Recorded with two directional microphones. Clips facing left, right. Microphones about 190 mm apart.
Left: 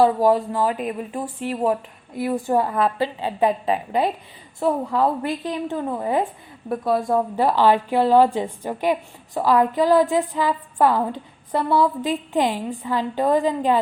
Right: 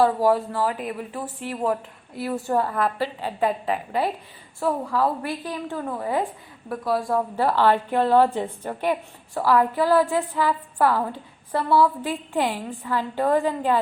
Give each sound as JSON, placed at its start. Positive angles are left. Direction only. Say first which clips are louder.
{"t": 0.0, "sound": "a woman's voice", "louder": "left 2 dB", "side_deg": 15}
{"t": 7.4, "sound": "a woman's voice", "louder": "left 2 dB", "side_deg": 15}